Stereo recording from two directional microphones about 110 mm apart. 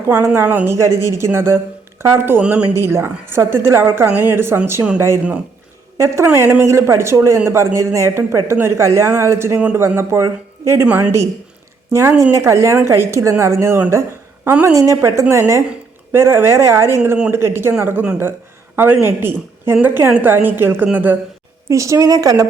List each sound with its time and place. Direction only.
0.0 s a woman's voice: 20° right (ahead or behind)
2.4 s a woman's voice: 10° right (ahead or behind)
2.7 s a man's voice: 25° right (ahead or behind)
6.2 s a man's voice: 20° right (ahead or behind)
10.8 s a woman's voice: 10° right (ahead or behind)
11.9 s a man's voice: 25° right (ahead or behind)
19.0 s a man's voice: 20° right (ahead or behind)
21.7 s a woman's voice: 30° right (ahead or behind)